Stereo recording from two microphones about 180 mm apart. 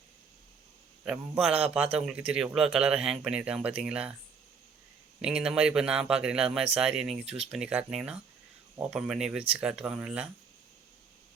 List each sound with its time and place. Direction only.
1.0 s speech: 5° right (ahead or behind)
5.2 s speech: 5° right (ahead or behind)